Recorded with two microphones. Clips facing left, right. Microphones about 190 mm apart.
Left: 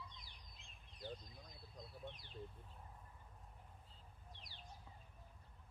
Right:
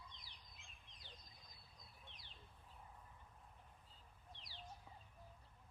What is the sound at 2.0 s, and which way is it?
Speech, 50° left (ahead or behind).